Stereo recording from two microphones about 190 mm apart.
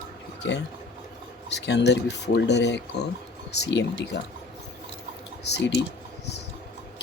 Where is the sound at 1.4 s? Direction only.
65° left (ahead or behind).